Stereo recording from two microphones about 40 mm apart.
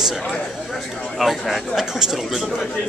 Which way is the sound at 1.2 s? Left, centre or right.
Centre.